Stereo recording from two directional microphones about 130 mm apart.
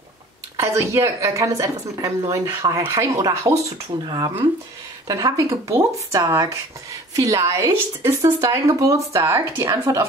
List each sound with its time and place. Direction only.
0.6 s speech: 20° right (ahead or behind)